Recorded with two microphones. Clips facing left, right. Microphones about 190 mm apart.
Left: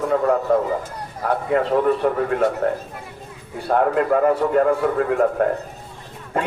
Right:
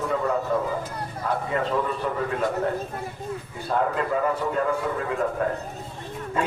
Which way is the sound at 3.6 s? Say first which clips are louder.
Left 7 dB; 60° left (ahead or behind).